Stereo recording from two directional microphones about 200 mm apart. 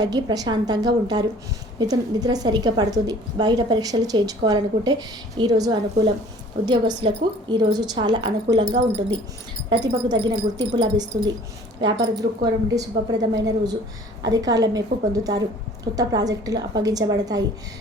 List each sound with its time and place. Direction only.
0.0 s a woman's voice: 20° right (ahead or behind)